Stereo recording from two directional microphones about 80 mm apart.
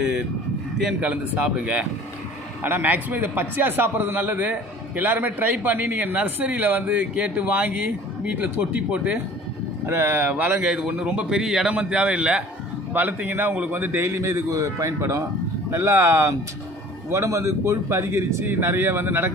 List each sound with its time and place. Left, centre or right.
0.0 s a man's voice: centre
2.6 s a man's voice: right
9.8 s a man's voice: right
10.6 s a man's voice: centre; by 19.3 s right